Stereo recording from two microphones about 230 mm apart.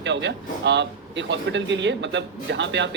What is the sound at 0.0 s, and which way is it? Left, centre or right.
Speech, right.